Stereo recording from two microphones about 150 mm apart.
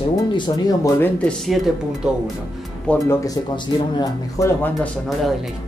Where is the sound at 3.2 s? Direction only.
25° left (ahead or behind).